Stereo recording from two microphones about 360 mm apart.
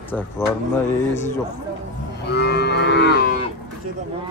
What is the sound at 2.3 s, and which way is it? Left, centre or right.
Livestock, left.